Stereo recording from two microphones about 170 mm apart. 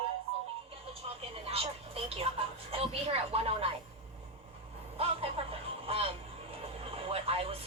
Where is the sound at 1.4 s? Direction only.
35° right (ahead or behind).